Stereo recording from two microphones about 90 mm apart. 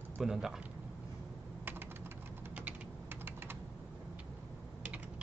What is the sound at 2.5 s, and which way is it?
Typing, 20° right (ahead or behind).